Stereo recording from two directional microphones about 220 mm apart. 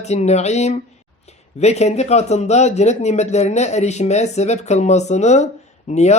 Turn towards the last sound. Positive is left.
turn(degrees=30)  # may be behind; listen again after turning